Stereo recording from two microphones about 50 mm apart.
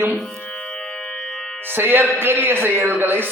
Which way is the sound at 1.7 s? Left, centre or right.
Right.